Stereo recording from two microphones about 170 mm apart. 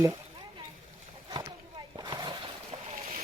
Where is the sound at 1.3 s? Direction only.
25° right (ahead or behind).